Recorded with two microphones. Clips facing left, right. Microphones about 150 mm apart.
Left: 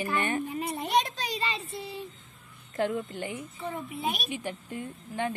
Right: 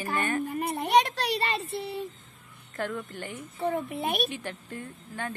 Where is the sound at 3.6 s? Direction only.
60° right (ahead or behind).